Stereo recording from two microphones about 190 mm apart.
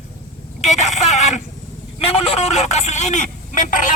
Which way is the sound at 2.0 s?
30° left (ahead or behind).